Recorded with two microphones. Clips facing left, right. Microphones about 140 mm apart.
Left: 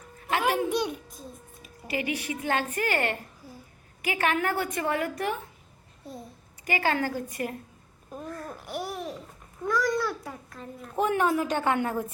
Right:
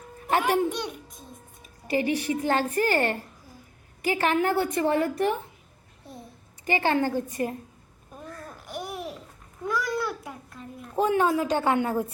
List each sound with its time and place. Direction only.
0.4 s a child's voice: 10° left (ahead or behind)
1.9 s a woman's voice: 30° right (ahead or behind)
6.7 s a woman's voice: 25° right (ahead or behind)
8.6 s babbling: 10° left (ahead or behind)
9.6 s babbling: 5° right (ahead or behind)
10.9 s a woman's voice: 25° right (ahead or behind)